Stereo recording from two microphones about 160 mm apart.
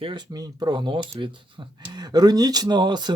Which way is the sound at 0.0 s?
30° right (ahead or behind).